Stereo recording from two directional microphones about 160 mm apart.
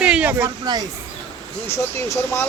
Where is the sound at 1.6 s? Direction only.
15° left (ahead or behind).